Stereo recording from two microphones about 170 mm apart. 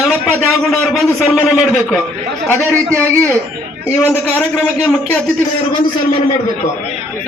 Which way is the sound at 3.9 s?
10° left (ahead or behind).